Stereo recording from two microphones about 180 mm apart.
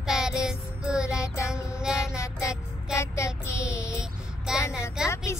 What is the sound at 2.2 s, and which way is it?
Child singing, 15° left (ahead or behind).